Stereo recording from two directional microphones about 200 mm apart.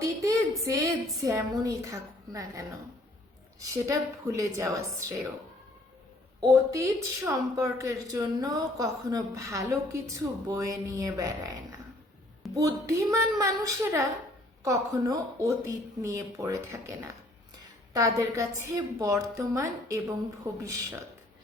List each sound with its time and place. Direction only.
0.0 s a sound: 15° right (ahead or behind)
1.2 s speech: 15° right (ahead or behind)
6.4 s speech: 15° right (ahead or behind)
12.5 s speech: 15° right (ahead or behind)